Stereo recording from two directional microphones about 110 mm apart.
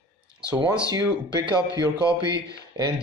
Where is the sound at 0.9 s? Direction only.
40° right (ahead or behind).